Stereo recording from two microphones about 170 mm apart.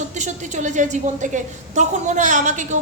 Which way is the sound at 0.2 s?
45° right (ahead or behind).